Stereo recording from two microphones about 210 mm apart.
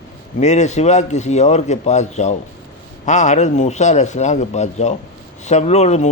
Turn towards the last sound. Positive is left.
turn(degrees=30)  # may be behind; listen again after turning